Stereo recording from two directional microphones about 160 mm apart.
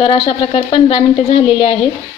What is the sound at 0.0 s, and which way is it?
A woman's voice, 30° left (ahead or behind).